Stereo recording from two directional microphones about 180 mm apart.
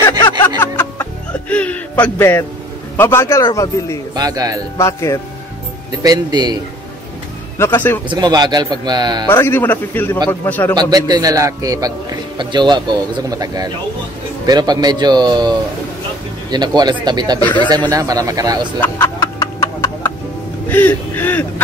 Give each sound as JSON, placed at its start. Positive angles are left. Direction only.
{"t": 0.6, "sound": "music", "side_deg": 10}
{"t": 3.0, "sound": "a man's voice", "side_deg": 15}
{"t": 4.1, "sound": "speech", "side_deg": -20}
{"t": 4.7, "sound": "a man's voice", "side_deg": 15}
{"t": 5.9, "sound": "speech", "side_deg": -20}
{"t": 7.5, "sound": "speech", "side_deg": 10}
{"t": 8.1, "sound": "speech", "side_deg": -25}
{"t": 9.3, "sound": "a man's voice", "side_deg": 15}
{"t": 10.8, "sound": "speech", "side_deg": -20}
{"t": 18.8, "sound": "a sound", "side_deg": 15}
{"t": 20.6, "sound": "speech", "side_deg": 10}